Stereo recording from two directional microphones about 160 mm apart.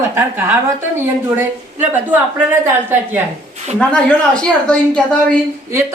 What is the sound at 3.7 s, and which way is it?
Speech, 5° left (ahead or behind).